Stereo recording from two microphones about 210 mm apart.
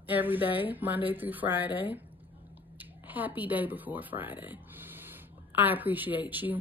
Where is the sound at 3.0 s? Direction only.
10° right (ahead or behind).